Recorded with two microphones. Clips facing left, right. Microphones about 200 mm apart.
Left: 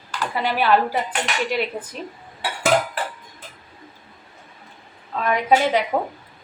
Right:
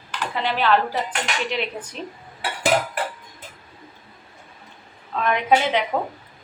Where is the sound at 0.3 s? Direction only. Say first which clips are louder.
Left 1 dB; 10° left (ahead or behind).